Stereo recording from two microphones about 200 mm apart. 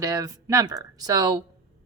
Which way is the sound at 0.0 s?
15° right (ahead or behind).